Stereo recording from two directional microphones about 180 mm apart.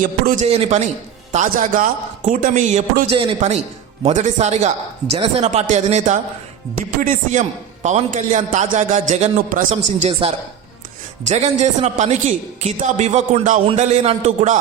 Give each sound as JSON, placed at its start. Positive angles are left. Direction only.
{"t": 0.0, "sound": "a man's voice", "side_deg": -45}